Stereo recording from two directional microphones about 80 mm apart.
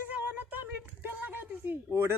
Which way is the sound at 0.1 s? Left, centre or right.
Centre.